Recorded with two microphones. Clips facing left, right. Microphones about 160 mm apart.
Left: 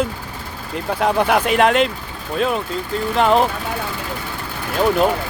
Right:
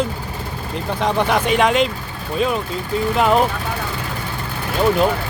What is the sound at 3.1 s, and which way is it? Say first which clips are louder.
Speech: left 1 dB; centre (ahead or behind).